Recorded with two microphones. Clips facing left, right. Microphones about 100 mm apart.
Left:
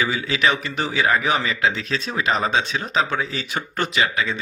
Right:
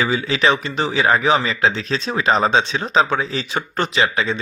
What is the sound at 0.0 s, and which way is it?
Speech, 30° right (ahead or behind).